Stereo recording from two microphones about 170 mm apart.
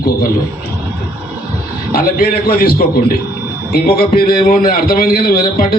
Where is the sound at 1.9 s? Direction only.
60° left (ahead or behind).